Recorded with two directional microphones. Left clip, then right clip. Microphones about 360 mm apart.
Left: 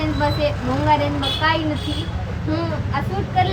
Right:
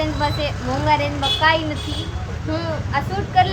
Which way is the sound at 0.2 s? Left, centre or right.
Centre.